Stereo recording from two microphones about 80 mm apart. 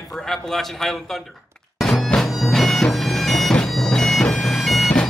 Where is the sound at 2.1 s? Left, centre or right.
Centre.